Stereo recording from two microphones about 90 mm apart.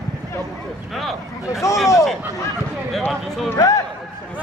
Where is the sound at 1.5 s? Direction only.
35° left (ahead or behind).